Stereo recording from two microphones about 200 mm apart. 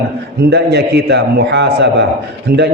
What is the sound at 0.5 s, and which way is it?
A man's voice, 55° right (ahead or behind).